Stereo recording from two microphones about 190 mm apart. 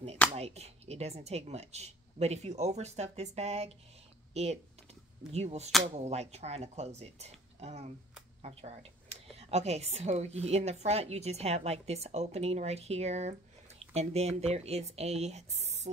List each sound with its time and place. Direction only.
0.3 s speech: 35° right (ahead or behind)